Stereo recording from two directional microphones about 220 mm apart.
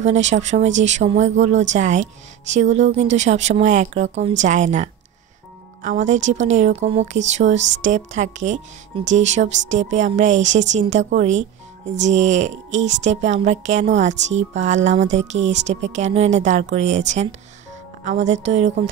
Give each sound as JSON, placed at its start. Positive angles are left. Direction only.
{"t": 0.0, "sound": "speech", "side_deg": -30}